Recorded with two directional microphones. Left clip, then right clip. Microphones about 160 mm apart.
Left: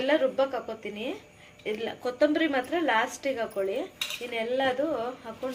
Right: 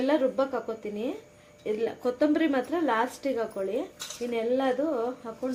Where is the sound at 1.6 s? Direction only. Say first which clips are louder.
Right 3 dB; 60° right (ahead or behind).